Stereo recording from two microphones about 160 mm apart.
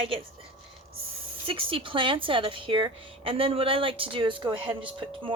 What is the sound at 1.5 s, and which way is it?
Speech, 35° right (ahead or behind).